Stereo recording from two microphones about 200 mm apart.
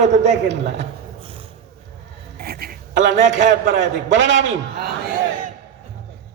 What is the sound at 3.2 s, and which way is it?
A man's voice, 65° right (ahead or behind).